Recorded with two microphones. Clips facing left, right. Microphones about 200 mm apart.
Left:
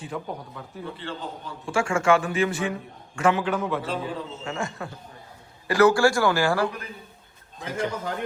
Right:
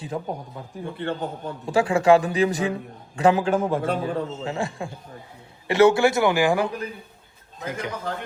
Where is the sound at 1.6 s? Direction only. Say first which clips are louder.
Right 4 dB; 35° right (ahead or behind); by 4.2 s 55° right (ahead or behind).